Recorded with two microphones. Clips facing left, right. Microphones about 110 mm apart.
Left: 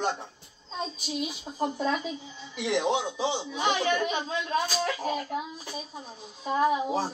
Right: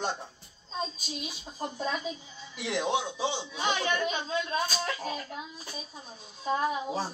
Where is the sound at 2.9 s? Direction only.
20° left (ahead or behind).